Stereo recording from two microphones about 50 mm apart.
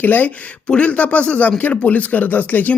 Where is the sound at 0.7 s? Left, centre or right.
Left.